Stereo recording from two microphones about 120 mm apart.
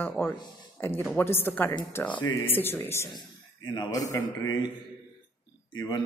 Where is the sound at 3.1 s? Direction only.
35° left (ahead or behind).